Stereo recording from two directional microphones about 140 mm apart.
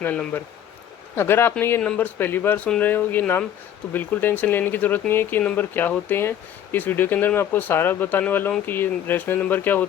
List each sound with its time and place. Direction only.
0.0 s speech: 15° left (ahead or behind)